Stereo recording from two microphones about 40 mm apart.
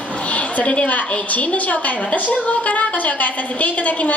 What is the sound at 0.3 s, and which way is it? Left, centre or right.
A woman's voice, left.